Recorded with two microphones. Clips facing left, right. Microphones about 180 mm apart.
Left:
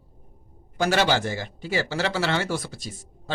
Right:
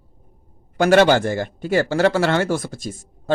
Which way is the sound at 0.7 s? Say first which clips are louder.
Right 8 dB; 60° right (ahead or behind).